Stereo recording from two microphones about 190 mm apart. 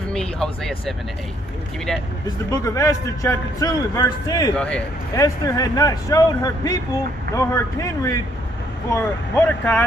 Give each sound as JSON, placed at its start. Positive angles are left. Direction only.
{"t": 0.1, "sound": "speech", "side_deg": 5}
{"t": 2.2, "sound": "a man's voice", "side_deg": 20}
{"t": 4.6, "sound": "speech", "side_deg": 5}
{"t": 5.2, "sound": "a man's voice", "side_deg": 20}